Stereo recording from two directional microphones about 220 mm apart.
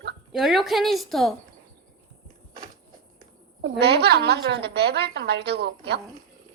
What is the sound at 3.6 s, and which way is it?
A woman's voice, 50° right (ahead or behind).